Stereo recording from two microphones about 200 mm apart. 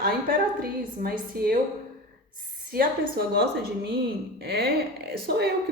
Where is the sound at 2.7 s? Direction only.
50° right (ahead or behind).